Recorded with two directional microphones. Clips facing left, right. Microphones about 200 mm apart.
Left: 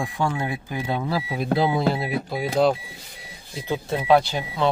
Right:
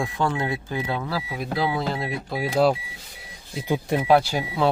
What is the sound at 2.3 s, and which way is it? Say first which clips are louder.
Speech: even; 5° right (ahead or behind).